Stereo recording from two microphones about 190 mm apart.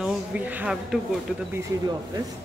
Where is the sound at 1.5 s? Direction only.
20° right (ahead or behind).